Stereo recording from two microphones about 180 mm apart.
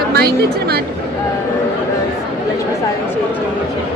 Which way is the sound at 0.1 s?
60° right (ahead or behind).